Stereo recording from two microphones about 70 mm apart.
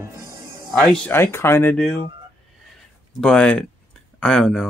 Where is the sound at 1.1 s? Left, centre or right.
Left.